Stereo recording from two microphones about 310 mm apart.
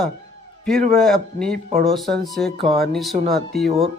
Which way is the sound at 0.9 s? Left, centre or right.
Centre.